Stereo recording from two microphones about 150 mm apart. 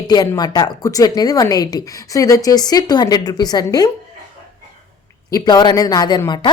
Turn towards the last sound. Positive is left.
turn(degrees=30)  # may be behind; listen again after turning